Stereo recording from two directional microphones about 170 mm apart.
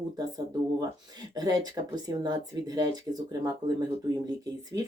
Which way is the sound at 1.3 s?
25° right (ahead or behind).